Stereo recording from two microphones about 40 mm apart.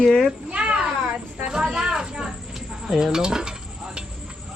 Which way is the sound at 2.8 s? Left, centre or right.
Centre.